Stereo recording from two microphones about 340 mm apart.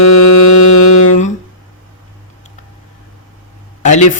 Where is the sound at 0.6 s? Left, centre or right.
Left.